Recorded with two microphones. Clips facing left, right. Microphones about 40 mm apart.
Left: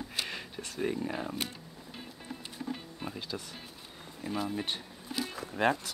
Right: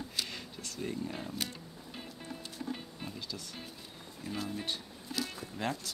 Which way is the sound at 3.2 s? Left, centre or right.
Left.